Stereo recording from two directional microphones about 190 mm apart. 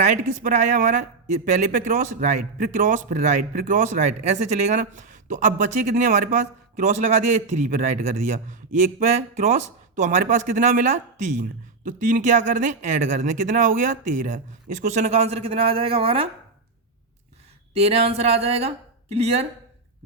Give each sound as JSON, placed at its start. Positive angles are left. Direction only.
{"t": 0.0, "sound": "a man's voice", "side_deg": -40}
{"t": 17.7, "sound": "a man's voice", "side_deg": -30}